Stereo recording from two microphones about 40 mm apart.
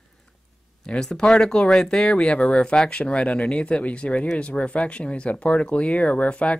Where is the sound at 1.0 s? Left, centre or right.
Centre.